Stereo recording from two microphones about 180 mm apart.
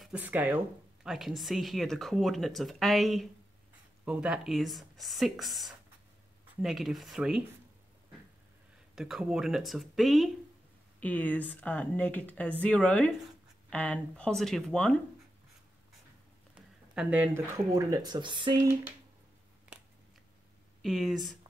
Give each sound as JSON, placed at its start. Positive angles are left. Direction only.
{"t": 0.0, "sound": "speech", "side_deg": -10}
{"t": 8.9, "sound": "speech", "side_deg": -5}
{"t": 16.9, "sound": "speech", "side_deg": -5}
{"t": 20.8, "sound": "speech", "side_deg": 0}